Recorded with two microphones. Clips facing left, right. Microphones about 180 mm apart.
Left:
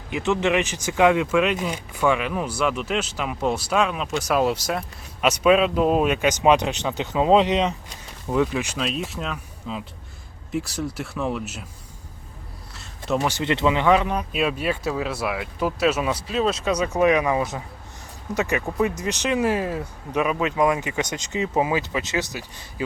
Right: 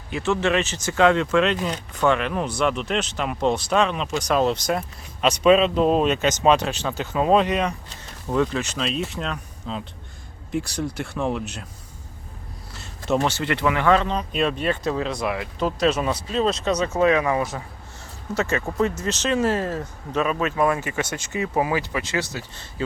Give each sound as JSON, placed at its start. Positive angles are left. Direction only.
{"t": 0.1, "sound": "speech", "side_deg": 15}
{"t": 12.7, "sound": "a sound", "side_deg": 0}
{"t": 13.2, "sound": "speech", "side_deg": 15}